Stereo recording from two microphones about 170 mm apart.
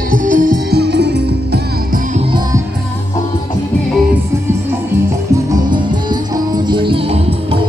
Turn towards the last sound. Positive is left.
turn(degrees=-30)  # may be behind; listen again after turning